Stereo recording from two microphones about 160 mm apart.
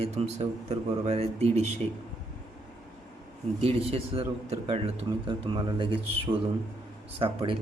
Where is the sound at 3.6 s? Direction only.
35° right (ahead or behind).